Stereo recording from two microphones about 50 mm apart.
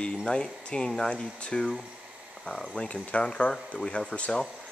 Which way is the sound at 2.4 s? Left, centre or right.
Centre.